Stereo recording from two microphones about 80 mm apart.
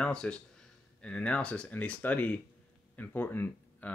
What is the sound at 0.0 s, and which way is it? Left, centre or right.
Speech, centre.